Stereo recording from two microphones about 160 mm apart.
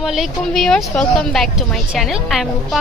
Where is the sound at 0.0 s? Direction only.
Centre (ahead or behind).